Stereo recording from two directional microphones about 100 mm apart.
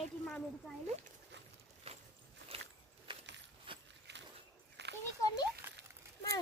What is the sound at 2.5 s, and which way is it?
Walk, 80° right.